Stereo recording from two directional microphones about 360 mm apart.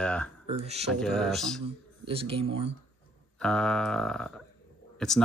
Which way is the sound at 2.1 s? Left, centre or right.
Centre.